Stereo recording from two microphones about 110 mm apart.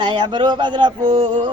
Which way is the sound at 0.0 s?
45° right (ahead or behind).